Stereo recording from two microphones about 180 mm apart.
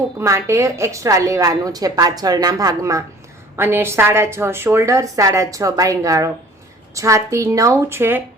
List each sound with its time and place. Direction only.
0.2 s a woman's voice: 15° right (ahead or behind)